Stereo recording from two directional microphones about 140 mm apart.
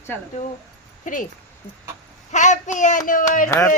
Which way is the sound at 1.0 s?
70° left (ahead or behind).